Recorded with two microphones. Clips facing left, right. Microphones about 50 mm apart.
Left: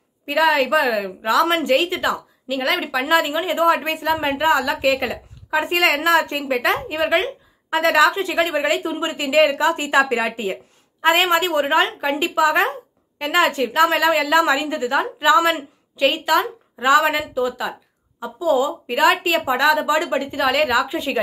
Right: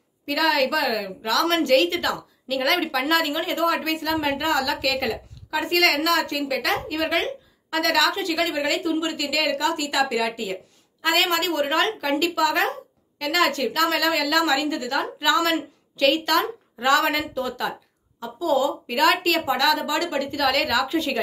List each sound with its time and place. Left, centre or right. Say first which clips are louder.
0.3 s a woman's voice: left 4 dB; left
2.5 s speech: left 1 dB; centre
3.6 s a woman's voice: left 5 dB; left
5.9 s a woman's voice: left 4 dB; left